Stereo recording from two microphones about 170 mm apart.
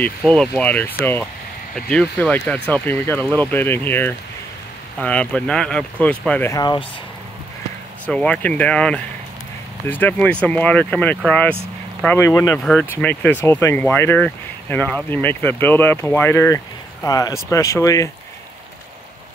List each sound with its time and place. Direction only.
0.3 s speech: 5° left (ahead or behind)
6.5 s speech: 25° left (ahead or behind)
8.1 s speech: 5° left (ahead or behind)